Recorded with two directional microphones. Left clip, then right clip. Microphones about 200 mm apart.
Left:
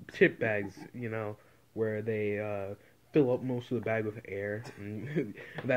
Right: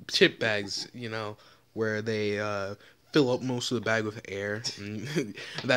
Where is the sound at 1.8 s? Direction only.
40° right (ahead or behind).